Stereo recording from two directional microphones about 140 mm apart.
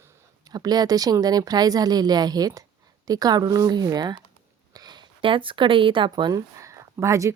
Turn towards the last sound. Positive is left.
turn(degrees=-20)  # may be behind; listen again after turning